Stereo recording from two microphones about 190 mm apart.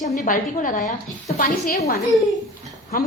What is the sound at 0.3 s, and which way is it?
A woman's voice, 45° left (ahead or behind).